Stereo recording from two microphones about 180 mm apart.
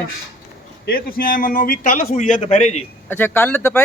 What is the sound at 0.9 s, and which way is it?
A man's voice, 55° left (ahead or behind).